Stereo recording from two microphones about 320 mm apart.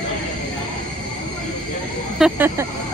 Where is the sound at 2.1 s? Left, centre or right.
Centre.